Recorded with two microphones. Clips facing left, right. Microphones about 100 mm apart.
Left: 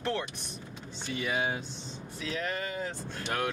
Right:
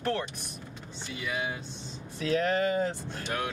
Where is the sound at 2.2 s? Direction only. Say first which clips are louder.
Right 8 dB; 45° right (ahead or behind).